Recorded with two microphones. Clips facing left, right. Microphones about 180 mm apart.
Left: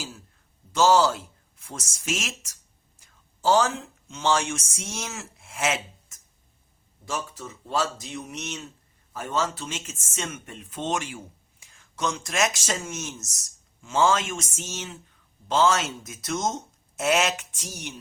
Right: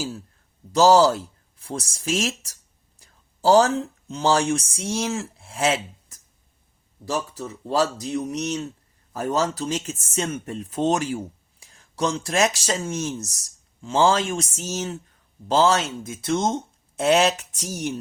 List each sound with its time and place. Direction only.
0.7 s speech: 35° right (ahead or behind)